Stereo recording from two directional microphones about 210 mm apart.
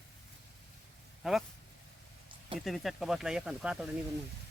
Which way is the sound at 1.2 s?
Centre (ahead or behind).